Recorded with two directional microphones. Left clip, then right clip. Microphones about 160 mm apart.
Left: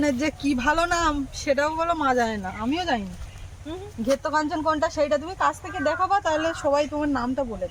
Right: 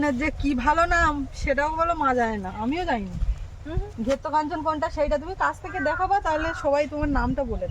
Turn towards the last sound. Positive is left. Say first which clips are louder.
# left 1 dB
turn(degrees=-35)  # may be behind; listen again after turning